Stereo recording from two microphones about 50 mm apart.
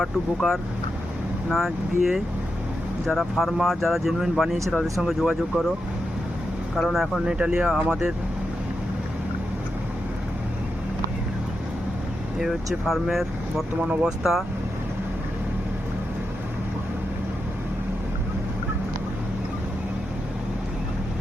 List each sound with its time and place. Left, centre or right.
0.0 s speech: centre
6.7 s speech: centre
7.3 s speech: centre
12.4 s speech: centre